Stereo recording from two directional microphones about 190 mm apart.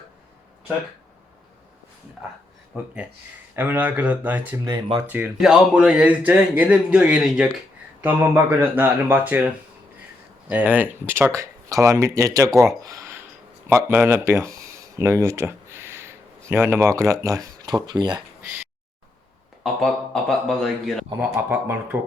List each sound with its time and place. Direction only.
2.7 s speech: 5° right (ahead or behind)
4.6 s speech: 20° right (ahead or behind)
5.0 s speech: 10° right (ahead or behind)
10.5 s speech: 10° right (ahead or behind)
19.6 s speech: centre (ahead or behind)
21.2 s speech: 10° right (ahead or behind)